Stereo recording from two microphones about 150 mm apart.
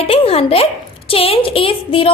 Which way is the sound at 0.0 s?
40° left (ahead or behind).